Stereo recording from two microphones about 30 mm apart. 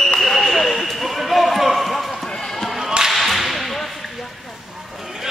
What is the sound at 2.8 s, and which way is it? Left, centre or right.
Whip, right.